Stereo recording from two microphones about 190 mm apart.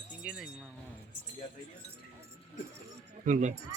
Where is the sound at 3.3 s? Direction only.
40° right (ahead or behind).